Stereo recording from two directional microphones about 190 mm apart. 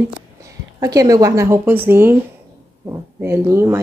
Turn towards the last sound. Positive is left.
turn(degrees=-15)  # may be behind; listen again after turning